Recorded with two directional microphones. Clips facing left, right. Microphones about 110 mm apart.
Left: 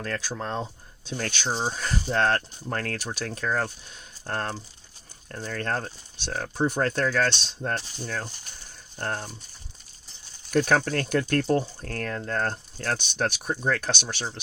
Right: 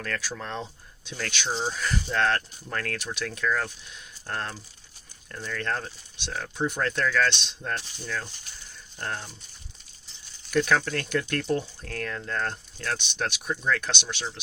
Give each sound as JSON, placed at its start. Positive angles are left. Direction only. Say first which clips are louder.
{"t": 0.0, "sound": "speech", "louder": "left 2 dB", "side_deg": 30}
{"t": 10.5, "sound": "speech", "louder": "left 2 dB", "side_deg": 40}